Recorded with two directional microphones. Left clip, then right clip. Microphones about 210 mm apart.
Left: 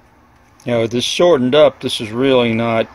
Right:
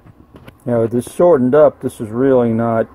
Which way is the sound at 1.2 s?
25° left (ahead or behind).